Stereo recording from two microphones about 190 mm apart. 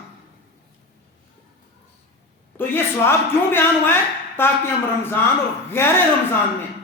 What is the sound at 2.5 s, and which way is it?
A man's voice, 10° left (ahead or behind).